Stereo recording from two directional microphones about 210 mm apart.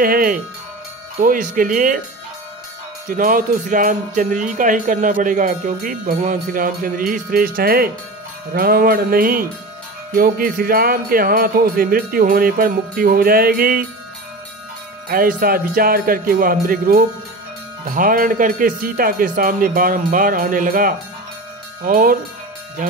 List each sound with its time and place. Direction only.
0.0 s jingle bell: 45° right (ahead or behind)
1.2 s music: 40° right (ahead or behind)
3.1 s music: 40° right (ahead or behind)
8.5 s jingle bell: 45° right (ahead or behind)
15.0 s jingle bell: 45° right (ahead or behind)
21.8 s music: 40° right (ahead or behind)